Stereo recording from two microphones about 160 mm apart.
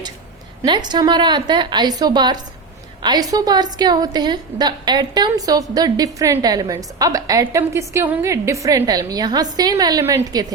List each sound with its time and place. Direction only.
0.6 s a woman's voice: 25° right (ahead or behind)